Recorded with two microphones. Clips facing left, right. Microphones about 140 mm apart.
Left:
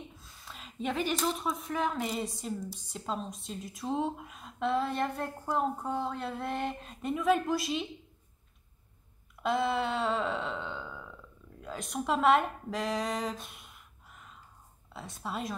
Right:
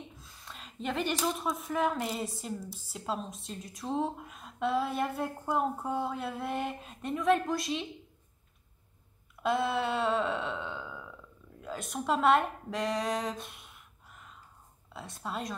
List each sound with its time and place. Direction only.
0.1 s speech: centre (ahead or behind)
9.4 s speech: centre (ahead or behind)